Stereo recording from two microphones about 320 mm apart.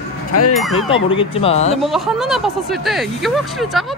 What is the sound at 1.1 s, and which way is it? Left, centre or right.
Speech, centre.